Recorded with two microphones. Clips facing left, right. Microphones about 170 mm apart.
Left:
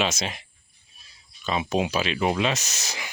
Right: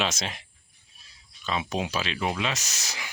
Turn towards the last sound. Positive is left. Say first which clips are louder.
# left 3 dB
turn(degrees=20)  # may be behind; listen again after turning